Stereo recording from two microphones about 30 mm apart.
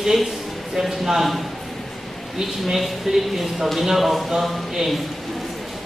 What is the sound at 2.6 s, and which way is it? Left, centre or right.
A man's voice, centre.